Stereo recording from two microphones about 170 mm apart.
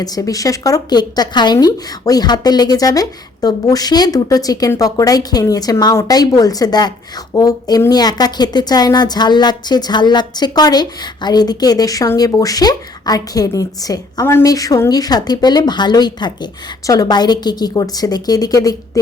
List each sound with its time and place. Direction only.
0.0 s speech: 20° left (ahead or behind)